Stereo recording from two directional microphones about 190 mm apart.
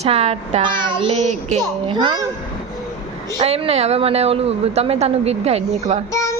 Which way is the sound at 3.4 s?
30° right (ahead or behind).